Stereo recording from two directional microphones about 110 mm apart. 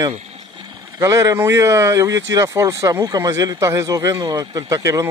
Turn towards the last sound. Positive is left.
turn(degrees=-30)  # may be behind; listen again after turning